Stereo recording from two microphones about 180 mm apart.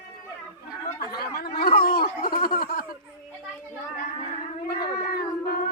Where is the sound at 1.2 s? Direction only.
60° left (ahead or behind).